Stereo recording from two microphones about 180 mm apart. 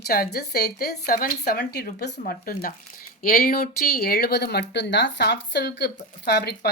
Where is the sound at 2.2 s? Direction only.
55° left (ahead or behind).